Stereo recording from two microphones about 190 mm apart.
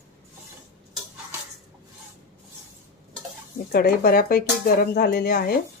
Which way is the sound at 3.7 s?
50° left (ahead or behind).